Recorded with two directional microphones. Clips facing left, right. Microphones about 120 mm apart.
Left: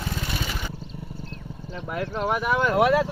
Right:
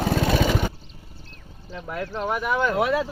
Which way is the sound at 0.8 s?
40° left (ahead or behind).